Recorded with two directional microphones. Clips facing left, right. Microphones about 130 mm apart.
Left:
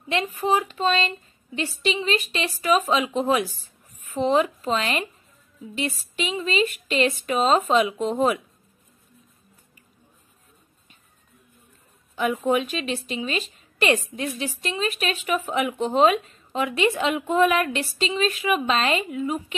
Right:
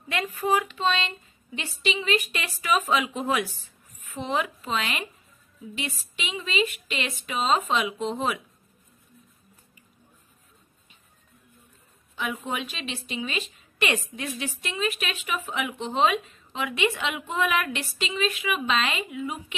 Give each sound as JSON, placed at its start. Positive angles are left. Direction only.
{"t": 0.1, "sound": "speech", "side_deg": 25}
{"t": 0.7, "sound": "a woman's voice", "side_deg": 40}
{"t": 12.2, "sound": "a woman's voice", "side_deg": 45}